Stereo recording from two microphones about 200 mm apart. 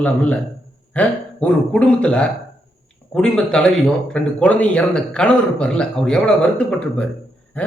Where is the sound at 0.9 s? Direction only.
5° left (ahead or behind).